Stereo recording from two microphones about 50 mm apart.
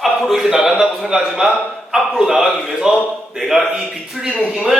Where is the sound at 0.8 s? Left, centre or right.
Centre.